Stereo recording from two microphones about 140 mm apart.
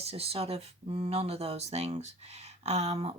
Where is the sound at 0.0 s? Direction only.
45° right (ahead or behind).